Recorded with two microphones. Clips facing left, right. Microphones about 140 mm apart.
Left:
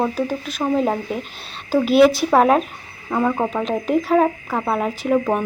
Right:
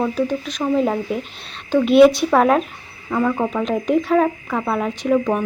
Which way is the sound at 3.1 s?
15° left (ahead or behind).